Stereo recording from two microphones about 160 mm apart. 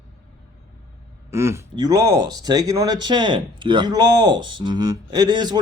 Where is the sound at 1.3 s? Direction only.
15° right (ahead or behind).